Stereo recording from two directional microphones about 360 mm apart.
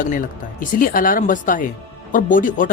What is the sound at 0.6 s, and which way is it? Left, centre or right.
Speech, left.